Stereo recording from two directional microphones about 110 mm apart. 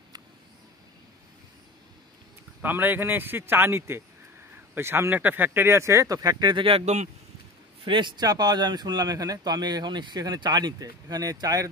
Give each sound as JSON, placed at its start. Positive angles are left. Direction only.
{"t": 2.6, "sound": "speech", "side_deg": -15}
{"t": 7.8, "sound": "speech", "side_deg": -45}